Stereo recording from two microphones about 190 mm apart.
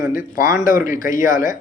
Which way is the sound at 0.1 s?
45° left (ahead or behind).